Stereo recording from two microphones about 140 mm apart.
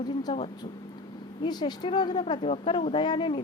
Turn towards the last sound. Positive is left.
turn(degrees=35)  # may be behind; listen again after turning